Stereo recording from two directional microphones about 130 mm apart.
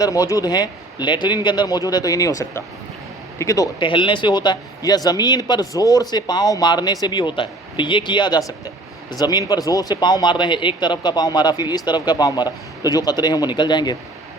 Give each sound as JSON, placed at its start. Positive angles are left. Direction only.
{"t": 0.0, "sound": "a man's voice", "side_deg": 25}
{"t": 3.8, "sound": "a man's voice", "side_deg": 40}